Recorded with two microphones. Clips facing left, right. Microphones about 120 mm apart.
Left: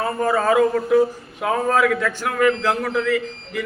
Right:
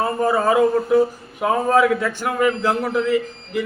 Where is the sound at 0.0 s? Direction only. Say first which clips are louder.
Right 1 dB; 20° right (ahead or behind).